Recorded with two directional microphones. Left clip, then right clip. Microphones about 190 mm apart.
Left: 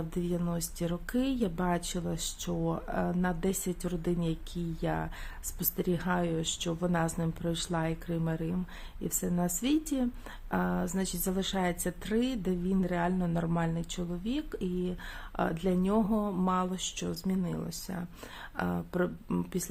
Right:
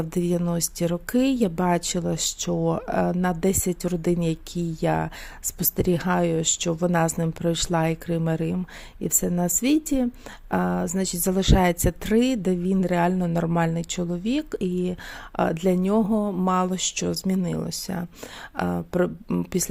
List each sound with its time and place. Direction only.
0.1 s speech: 45° right (ahead or behind)